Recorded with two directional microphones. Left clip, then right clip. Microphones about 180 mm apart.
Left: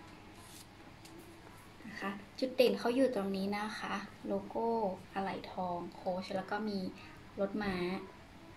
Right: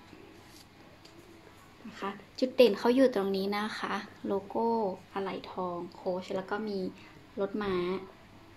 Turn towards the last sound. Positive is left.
turn(degrees=-35)  # may be behind; listen again after turning